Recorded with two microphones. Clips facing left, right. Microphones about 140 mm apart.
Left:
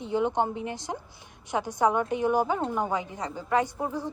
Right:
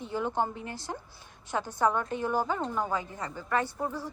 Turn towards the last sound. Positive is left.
turn(degrees=15)  # may be behind; listen again after turning